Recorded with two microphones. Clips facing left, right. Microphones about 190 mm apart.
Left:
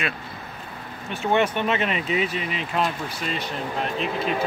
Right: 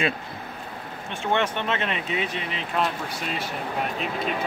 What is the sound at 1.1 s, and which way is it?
Speech, 5° left (ahead or behind).